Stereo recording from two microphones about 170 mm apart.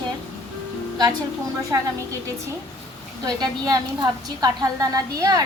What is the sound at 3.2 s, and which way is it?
A woman's voice, 25° right (ahead or behind).